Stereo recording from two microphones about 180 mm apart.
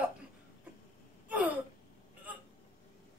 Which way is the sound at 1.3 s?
10° right (ahead or behind).